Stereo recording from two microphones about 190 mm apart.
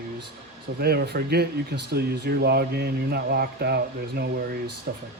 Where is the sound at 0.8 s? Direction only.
60° right (ahead or behind).